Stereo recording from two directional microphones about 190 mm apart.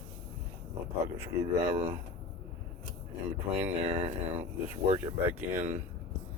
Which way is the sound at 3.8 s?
35° right (ahead or behind).